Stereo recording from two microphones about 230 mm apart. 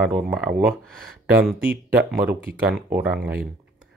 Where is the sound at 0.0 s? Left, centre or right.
Centre.